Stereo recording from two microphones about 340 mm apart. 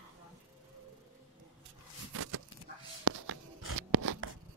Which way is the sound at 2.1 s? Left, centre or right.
Right.